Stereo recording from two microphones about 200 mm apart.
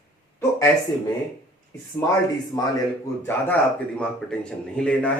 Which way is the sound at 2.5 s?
20° left (ahead or behind).